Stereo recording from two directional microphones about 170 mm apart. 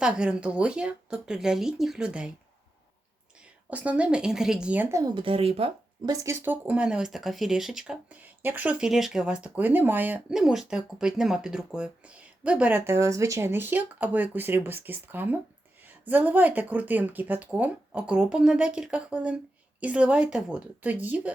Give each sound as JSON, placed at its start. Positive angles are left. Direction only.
{"t": 0.0, "sound": "speech", "side_deg": -5}
{"t": 3.4, "sound": "speech", "side_deg": -10}
{"t": 5.1, "sound": "speech", "side_deg": -30}
{"t": 6.0, "sound": "speech", "side_deg": -20}
{"t": 6.4, "sound": "speech", "side_deg": -10}